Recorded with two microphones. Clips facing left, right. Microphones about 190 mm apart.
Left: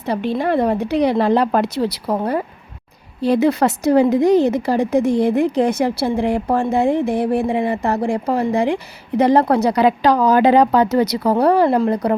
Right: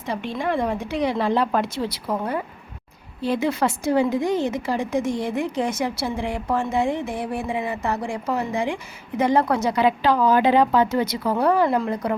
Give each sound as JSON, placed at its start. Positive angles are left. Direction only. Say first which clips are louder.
{"t": 0.3, "sound": "a woman's voice", "louder": "left 5 dB", "side_deg": 35}